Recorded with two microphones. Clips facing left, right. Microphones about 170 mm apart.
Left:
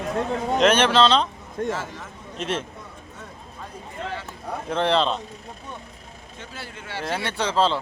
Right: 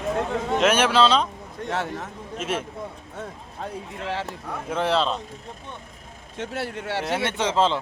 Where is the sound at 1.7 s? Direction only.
65° right (ahead or behind).